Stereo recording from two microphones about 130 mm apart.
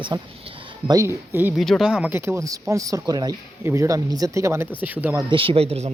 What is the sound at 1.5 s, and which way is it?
Speech, centre (ahead or behind).